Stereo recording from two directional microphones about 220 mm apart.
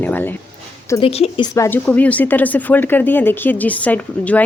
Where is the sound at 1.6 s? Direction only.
10° left (ahead or behind).